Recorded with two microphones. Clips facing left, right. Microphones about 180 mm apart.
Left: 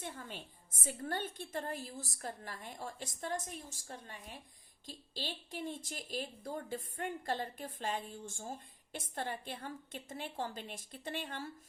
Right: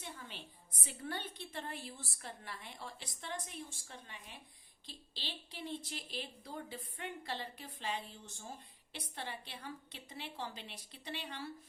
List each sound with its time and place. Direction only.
0.0 s speech: 45° left (ahead or behind)